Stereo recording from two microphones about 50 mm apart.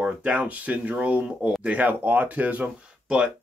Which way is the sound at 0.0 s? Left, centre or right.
Right.